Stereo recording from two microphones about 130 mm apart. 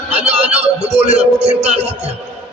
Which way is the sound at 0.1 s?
60° right (ahead or behind).